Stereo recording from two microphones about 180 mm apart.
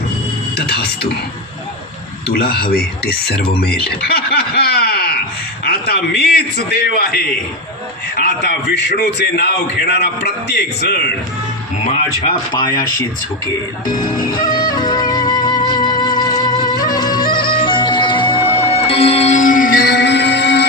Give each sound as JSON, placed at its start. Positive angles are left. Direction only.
{"t": 0.5, "sound": "music", "side_deg": 60}
{"t": 2.3, "sound": "speech", "side_deg": 60}
{"t": 8.1, "sound": "a man's voice", "side_deg": 65}
{"t": 12.2, "sound": "speech", "side_deg": 25}
{"t": 13.8, "sound": "speech", "side_deg": 20}
{"t": 14.3, "sound": "music", "side_deg": 20}